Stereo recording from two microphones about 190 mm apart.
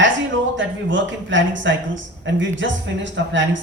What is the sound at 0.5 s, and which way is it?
Speech, 75° right (ahead or behind).